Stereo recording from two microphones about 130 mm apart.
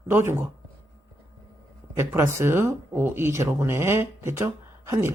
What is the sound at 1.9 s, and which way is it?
Speech, 20° right (ahead or behind).